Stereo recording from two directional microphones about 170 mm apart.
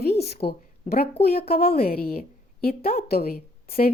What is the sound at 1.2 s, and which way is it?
A woman's voice, 65° left (ahead or behind).